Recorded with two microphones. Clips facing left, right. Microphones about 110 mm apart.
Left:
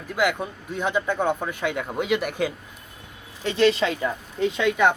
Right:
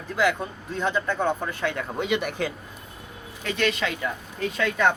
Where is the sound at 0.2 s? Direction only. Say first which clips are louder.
Even; 10° left (ahead or behind).